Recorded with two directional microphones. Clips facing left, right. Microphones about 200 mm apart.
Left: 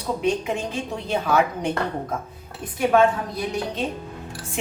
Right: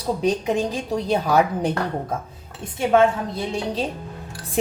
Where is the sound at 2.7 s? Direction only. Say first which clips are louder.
Right 1 dB; 25° right (ahead or behind).